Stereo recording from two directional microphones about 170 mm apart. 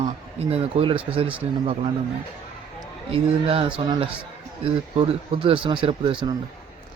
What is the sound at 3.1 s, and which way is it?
Speech, 35° right (ahead or behind).